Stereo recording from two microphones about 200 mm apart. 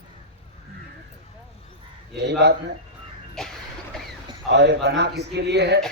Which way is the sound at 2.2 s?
55° right (ahead or behind).